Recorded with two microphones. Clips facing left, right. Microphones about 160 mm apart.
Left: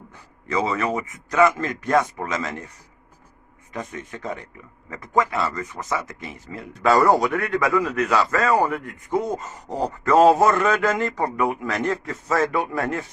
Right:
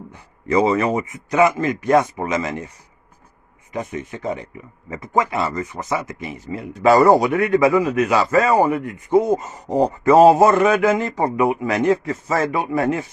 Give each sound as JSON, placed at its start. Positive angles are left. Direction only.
{"t": 0.4, "sound": "speech", "side_deg": -20}
{"t": 3.7, "sound": "speech", "side_deg": -15}